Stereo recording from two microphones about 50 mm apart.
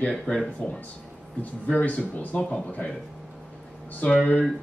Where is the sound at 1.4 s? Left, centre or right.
Left.